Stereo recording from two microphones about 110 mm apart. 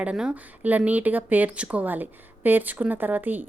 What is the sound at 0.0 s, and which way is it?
Speech, 10° right (ahead or behind).